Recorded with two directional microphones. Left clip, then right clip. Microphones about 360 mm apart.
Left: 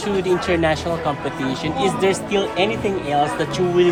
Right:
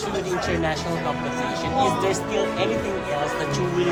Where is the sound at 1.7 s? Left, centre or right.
Left.